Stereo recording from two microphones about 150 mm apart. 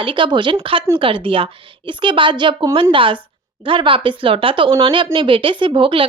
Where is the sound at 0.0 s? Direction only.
35° right (ahead or behind).